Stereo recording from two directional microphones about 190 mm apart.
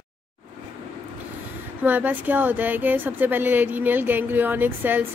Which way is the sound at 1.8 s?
10° right (ahead or behind).